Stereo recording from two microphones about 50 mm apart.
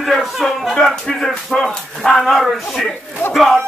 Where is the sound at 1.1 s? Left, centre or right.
Centre.